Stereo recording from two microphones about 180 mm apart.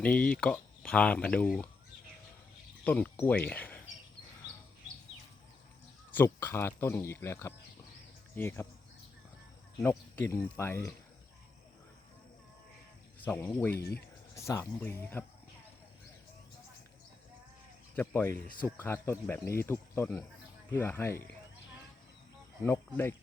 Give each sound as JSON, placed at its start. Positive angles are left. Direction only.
{"t": 0.0, "sound": "speech", "side_deg": 5}
{"t": 2.8, "sound": "speech", "side_deg": 10}
{"t": 6.1, "sound": "speech", "side_deg": 10}
{"t": 9.7, "sound": "speech", "side_deg": 20}
{"t": 13.2, "sound": "speech", "side_deg": 10}
{"t": 13.7, "sound": "speech", "side_deg": 60}
{"t": 14.3, "sound": "speech", "side_deg": 15}
{"t": 17.9, "sound": "speech", "side_deg": 10}
{"t": 22.6, "sound": "speech", "side_deg": 15}